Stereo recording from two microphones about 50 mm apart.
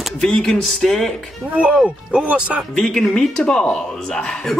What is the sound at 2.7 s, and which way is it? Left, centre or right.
Speech, centre.